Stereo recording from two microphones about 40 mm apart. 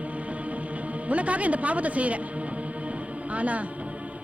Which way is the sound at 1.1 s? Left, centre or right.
Right.